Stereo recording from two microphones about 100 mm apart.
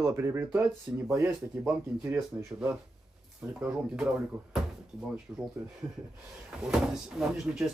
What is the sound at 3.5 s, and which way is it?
Speech, 10° right (ahead or behind).